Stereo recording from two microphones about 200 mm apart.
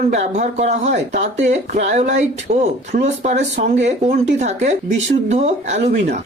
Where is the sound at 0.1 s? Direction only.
35° right (ahead or behind).